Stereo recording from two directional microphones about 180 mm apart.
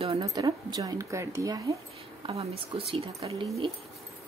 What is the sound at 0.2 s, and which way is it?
Speech, 20° right (ahead or behind).